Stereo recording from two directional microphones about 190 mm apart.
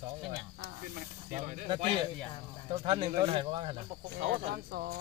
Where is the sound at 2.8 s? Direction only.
25° right (ahead or behind).